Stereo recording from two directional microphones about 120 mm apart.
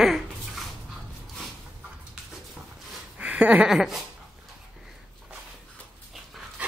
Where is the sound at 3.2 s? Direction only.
10° right (ahead or behind).